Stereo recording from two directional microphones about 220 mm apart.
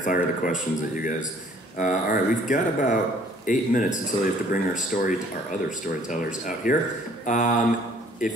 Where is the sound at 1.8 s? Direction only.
35° left (ahead or behind).